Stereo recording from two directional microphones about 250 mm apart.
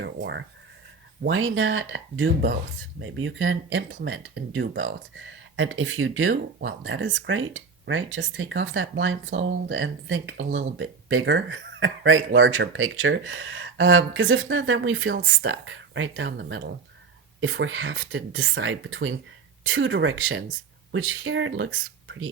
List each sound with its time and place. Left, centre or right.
0.0 s speech: right